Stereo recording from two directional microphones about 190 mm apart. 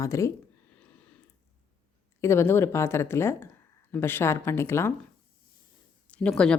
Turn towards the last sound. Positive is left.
turn(degrees=5)  # may be behind; listen again after turning